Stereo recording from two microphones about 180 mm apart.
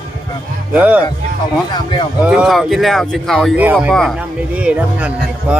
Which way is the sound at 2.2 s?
Centre (ahead or behind).